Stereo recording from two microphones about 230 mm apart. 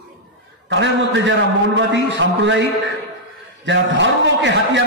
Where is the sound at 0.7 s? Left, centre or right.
Right.